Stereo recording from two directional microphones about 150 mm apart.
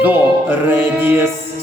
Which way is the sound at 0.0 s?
15° right (ahead or behind).